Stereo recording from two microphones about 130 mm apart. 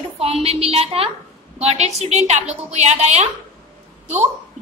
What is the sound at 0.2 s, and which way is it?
A woman's voice, 50° right (ahead or behind).